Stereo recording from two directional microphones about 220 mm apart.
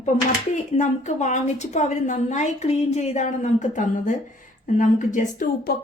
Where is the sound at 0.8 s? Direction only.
35° left (ahead or behind).